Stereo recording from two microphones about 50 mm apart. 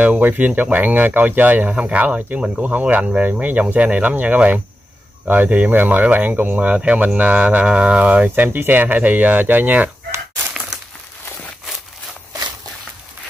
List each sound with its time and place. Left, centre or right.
0.0 s speech: right
6.8 s speech: right